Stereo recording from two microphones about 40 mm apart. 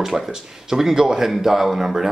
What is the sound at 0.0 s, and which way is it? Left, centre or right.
Speech, centre.